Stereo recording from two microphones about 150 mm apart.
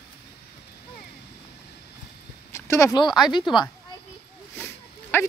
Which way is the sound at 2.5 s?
20° left (ahead or behind).